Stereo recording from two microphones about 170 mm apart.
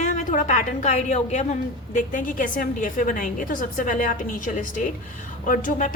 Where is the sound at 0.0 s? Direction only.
50° left (ahead or behind).